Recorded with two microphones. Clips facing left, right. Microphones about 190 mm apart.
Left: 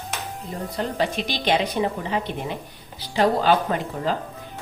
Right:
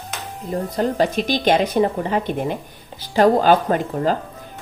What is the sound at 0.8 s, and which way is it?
A woman's voice, 45° right (ahead or behind).